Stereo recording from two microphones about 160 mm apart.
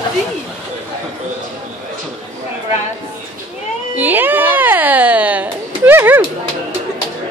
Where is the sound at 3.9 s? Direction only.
10° right (ahead or behind).